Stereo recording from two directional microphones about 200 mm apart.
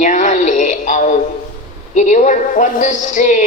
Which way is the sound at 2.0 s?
40° left (ahead or behind).